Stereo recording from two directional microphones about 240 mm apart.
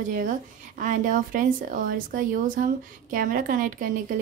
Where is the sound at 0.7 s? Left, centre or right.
Right.